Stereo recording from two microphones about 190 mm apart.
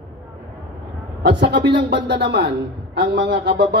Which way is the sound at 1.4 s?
65° right (ahead or behind).